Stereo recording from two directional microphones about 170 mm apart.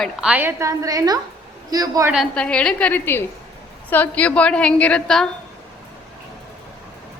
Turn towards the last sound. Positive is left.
turn(degrees=5)  # may be behind; listen again after turning